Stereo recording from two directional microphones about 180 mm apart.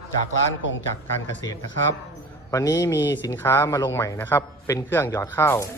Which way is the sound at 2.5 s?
20° left (ahead or behind).